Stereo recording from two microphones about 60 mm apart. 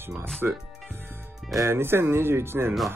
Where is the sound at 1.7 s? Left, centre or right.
Right.